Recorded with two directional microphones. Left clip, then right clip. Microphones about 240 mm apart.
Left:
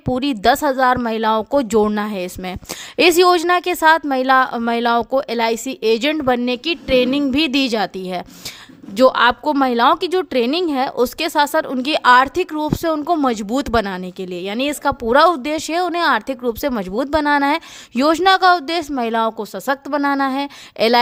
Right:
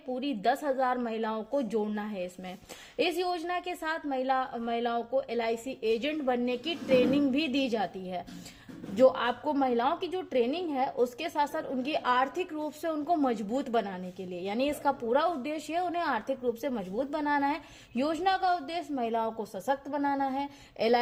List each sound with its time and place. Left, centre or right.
0.1 s a woman's voice: left